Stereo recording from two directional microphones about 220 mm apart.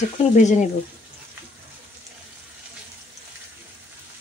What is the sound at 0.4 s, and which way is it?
Speech, 35° left (ahead or behind).